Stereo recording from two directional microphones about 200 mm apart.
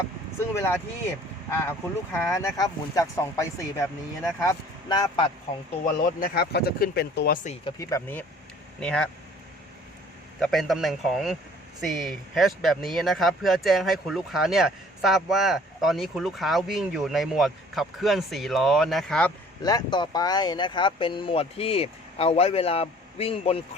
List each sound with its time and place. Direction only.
0.5 s speech: 10° left (ahead or behind)
2.1 s speech: 15° left (ahead or behind)
5.8 s speech: 45° left (ahead or behind)
7.6 s speech: 15° left (ahead or behind)
10.4 s speech: centre (ahead or behind)
19.6 s speech: 20° left (ahead or behind)